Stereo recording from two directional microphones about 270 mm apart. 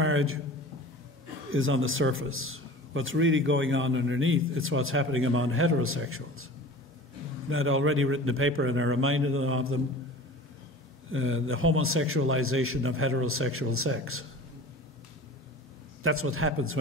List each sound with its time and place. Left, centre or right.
0.0 s a sound: right
1.5 s a man's voice: right
11.1 s a man's voice: right
16.0 s a man's voice: right